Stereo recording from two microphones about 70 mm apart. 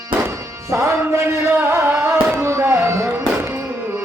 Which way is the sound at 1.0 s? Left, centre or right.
Right.